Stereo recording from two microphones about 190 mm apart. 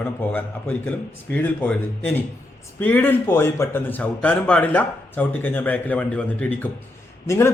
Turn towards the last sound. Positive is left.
turn(degrees=15)  # may be behind; listen again after turning